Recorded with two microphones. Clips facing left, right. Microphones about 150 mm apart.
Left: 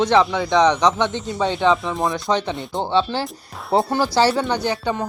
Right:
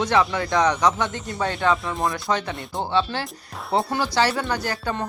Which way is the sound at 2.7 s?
30° left (ahead or behind).